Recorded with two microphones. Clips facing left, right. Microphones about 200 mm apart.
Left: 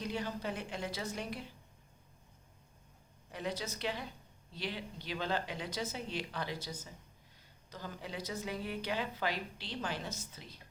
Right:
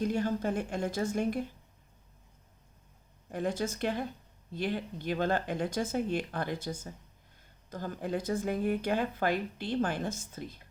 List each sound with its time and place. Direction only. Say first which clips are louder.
0.0 s a woman's voice: right 8 dB; 50° right (ahead or behind)
3.3 s a woman's voice: right 7 dB; 50° right (ahead or behind)